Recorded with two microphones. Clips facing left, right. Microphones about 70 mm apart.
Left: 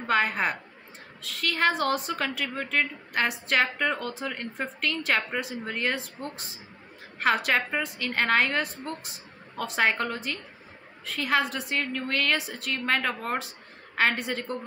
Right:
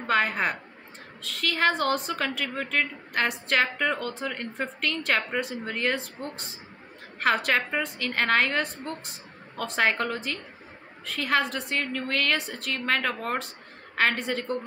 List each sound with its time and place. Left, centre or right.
0.0 s a woman's voice: centre